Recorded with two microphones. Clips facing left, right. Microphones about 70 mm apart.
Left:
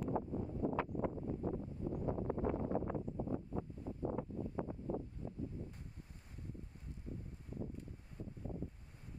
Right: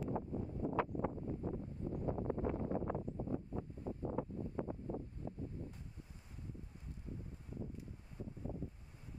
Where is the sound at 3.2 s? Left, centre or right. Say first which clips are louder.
Left 1 dB; left.